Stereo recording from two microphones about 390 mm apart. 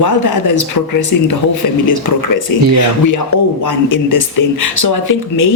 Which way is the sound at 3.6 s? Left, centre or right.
Left.